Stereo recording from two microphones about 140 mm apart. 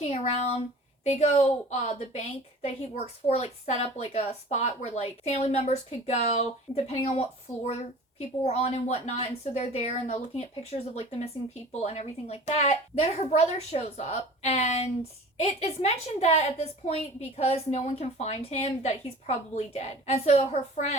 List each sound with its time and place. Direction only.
0.0 s a woman's voice: 50° left (ahead or behind)